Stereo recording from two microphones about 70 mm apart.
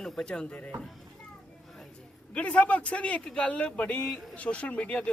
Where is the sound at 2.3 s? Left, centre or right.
Centre.